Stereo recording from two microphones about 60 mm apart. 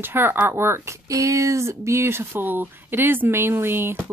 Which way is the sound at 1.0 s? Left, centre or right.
Right.